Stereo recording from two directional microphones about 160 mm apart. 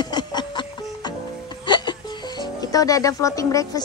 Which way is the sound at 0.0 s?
25° left (ahead or behind).